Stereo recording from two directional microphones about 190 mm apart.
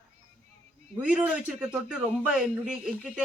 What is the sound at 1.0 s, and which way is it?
Speech, 5° right (ahead or behind).